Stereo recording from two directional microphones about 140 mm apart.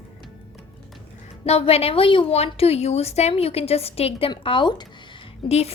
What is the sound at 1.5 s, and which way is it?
A woman's voice, 45° left (ahead or behind).